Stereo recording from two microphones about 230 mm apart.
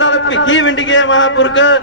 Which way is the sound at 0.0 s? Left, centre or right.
Left.